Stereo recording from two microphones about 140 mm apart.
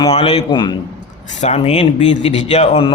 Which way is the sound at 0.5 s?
30° left (ahead or behind).